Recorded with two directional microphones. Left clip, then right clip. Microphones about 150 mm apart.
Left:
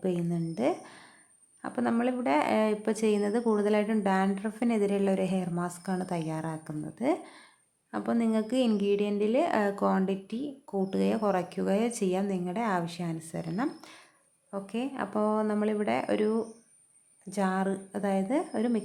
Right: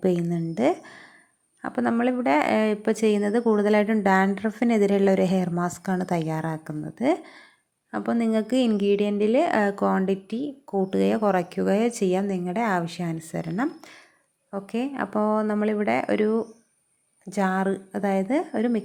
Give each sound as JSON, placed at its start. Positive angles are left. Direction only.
{"t": 0.0, "sound": "a woman's voice", "side_deg": -30}